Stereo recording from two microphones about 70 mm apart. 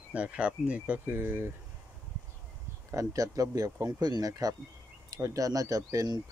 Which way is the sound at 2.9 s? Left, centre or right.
Right.